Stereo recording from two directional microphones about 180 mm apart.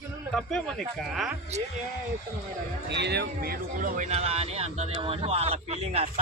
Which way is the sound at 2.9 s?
70° right (ahead or behind).